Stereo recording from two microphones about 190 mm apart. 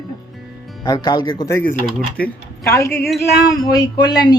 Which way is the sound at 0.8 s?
20° left (ahead or behind).